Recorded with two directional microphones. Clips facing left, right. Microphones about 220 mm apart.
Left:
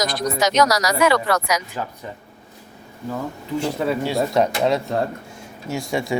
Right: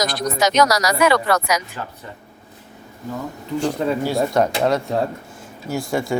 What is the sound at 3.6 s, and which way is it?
Speech, 5° left (ahead or behind).